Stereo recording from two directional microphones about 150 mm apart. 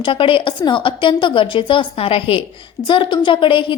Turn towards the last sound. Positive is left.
turn(degrees=35)  # may be behind; listen again after turning